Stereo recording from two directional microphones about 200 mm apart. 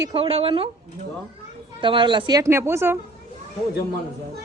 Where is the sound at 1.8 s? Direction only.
25° right (ahead or behind).